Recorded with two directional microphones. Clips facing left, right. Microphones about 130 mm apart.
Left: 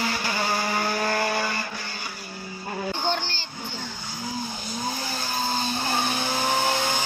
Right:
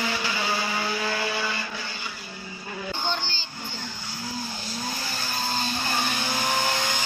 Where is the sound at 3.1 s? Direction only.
65° left (ahead or behind).